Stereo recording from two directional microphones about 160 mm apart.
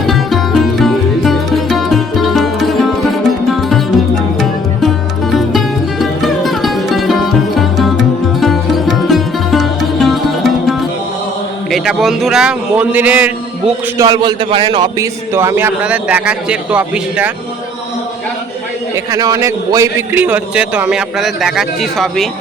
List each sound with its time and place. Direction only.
0.0 s music: centre (ahead or behind)
5.3 s music: centre (ahead or behind)
7.6 s sitar: centre (ahead or behind)
11.7 s a man's voice: centre (ahead or behind)
14.0 s a man's voice: 25° right (ahead or behind); by 17.3 s 10° right (ahead or behind)
18.9 s a man's voice: 20° right (ahead or behind); by 22.3 s centre (ahead or behind)